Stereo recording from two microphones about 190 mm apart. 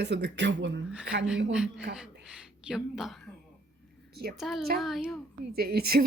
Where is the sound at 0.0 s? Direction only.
65° right (ahead or behind).